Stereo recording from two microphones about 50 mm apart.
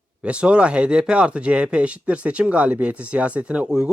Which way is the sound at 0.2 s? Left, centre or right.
Right.